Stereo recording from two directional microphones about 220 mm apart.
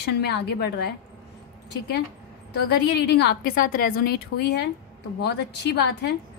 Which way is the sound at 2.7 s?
50° left (ahead or behind).